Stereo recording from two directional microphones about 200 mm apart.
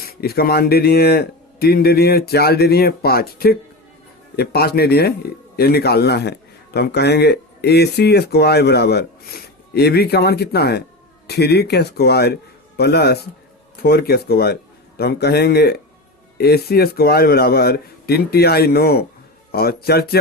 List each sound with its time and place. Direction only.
0.0 s a man's voice: 50° left (ahead or behind)